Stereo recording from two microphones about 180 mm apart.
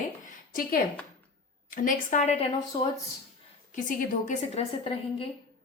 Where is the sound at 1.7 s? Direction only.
45° left (ahead or behind).